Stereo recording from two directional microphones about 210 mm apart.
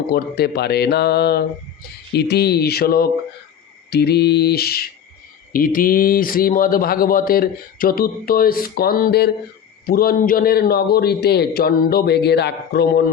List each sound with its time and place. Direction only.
0.1 s speech: 50° left (ahead or behind)